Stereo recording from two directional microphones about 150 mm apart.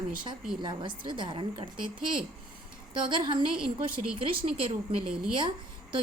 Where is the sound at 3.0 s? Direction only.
30° right (ahead or behind).